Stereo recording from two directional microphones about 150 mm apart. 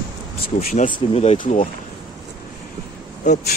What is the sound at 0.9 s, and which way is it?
Speech, 45° left (ahead or behind).